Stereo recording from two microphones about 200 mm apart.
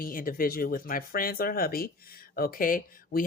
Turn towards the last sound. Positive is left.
turn(degrees=45)  # may be behind; listen again after turning